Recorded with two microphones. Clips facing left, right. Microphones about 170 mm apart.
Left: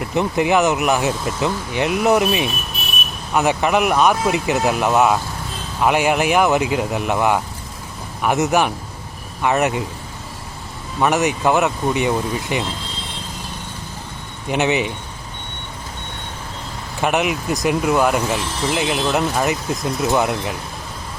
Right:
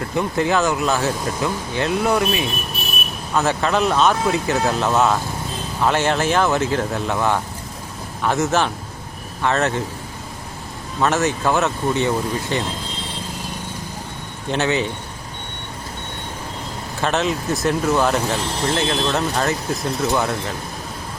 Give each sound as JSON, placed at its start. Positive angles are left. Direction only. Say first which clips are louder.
{"t": 0.0, "sound": "speech", "louder": "left 2 dB", "side_deg": 20}
{"t": 11.0, "sound": "speech", "louder": "left 2 dB", "side_deg": 15}
{"t": 14.5, "sound": "speech", "louder": "left 2 dB", "side_deg": 15}
{"t": 17.0, "sound": "speech", "louder": "left 2 dB", "side_deg": 15}